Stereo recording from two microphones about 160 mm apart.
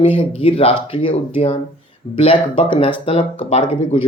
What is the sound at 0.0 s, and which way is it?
Speech, 35° left (ahead or behind).